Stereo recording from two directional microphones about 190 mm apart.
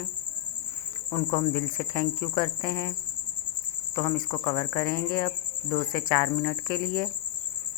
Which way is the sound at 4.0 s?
20° left (ahead or behind).